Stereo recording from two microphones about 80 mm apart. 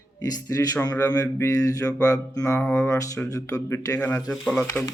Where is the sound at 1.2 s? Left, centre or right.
Left.